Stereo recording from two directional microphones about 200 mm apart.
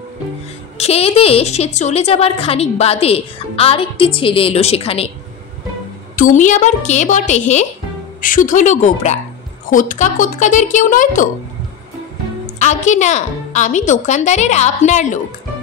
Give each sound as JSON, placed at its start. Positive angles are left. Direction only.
{"t": 0.7, "sound": "a woman's voice", "side_deg": 30}
{"t": 6.1, "sound": "a woman's voice", "side_deg": 40}
{"t": 12.5, "sound": "a woman's voice", "side_deg": 35}